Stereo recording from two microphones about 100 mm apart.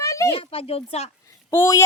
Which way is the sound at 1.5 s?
30° left (ahead or behind).